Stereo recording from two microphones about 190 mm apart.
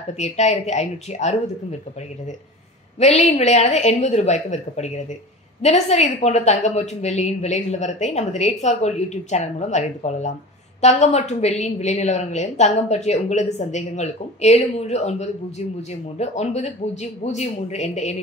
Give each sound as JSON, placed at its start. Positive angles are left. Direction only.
{"t": 0.2, "sound": "a woman's voice", "side_deg": 35}
{"t": 3.0, "sound": "a woman's voice", "side_deg": 35}